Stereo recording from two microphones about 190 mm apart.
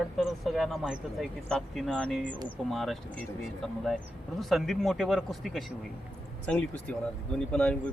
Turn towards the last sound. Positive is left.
turn(degrees=5)  # may be behind; listen again after turning